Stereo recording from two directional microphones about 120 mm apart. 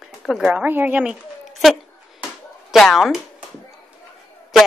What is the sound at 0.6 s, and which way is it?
Speech, 15° right (ahead or behind).